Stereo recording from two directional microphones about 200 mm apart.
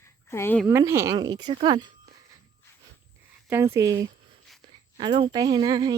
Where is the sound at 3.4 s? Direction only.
10° right (ahead or behind).